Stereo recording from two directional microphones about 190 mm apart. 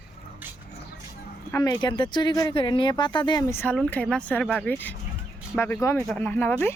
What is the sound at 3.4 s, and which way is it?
Speech, 10° left (ahead or behind).